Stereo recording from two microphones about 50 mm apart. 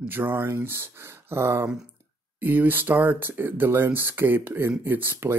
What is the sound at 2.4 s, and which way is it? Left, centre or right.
Speech, right.